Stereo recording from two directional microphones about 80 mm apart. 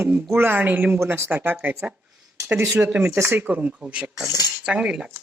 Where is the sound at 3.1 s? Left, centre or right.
Right.